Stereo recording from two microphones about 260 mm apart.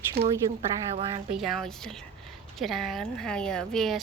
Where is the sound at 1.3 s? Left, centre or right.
Centre.